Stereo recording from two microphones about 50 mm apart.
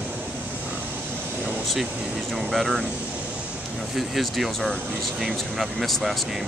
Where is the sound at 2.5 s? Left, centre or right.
Centre.